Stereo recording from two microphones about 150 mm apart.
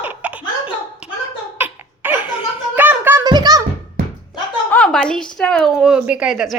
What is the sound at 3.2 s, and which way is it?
Music, 30° right (ahead or behind).